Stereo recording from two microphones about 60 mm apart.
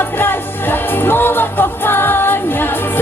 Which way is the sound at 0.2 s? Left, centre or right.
Left.